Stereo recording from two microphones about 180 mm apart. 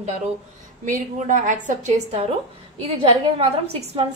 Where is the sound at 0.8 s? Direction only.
45° right (ahead or behind).